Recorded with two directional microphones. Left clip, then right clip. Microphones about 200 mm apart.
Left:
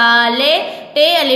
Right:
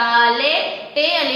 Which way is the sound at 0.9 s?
55° left (ahead or behind).